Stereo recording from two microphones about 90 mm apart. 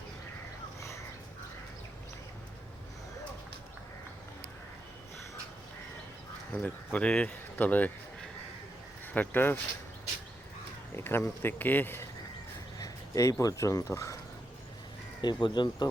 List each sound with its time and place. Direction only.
6.5 s speech: 20° left (ahead or behind)
9.1 s speech: 20° left (ahead or behind)
10.9 s speech: 25° left (ahead or behind)
12.8 s a sound: 35° left (ahead or behind)
13.4 s speech: 40° left (ahead or behind)
15.2 s speech: 55° left (ahead or behind)